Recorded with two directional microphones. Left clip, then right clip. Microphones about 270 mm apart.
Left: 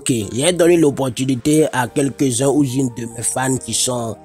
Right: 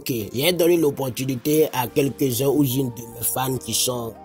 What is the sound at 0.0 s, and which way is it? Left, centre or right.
Speech, left.